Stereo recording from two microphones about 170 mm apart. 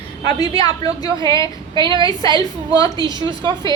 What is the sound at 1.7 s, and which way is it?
Speech, 30° right (ahead or behind).